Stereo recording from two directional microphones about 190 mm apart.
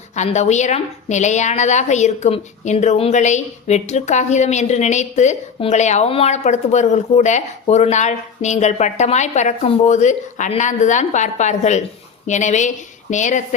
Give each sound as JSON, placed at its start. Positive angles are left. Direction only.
{"t": 0.2, "sound": "a woman's voice", "side_deg": 35}